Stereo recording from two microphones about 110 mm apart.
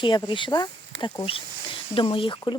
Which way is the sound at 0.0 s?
45° left (ahead or behind).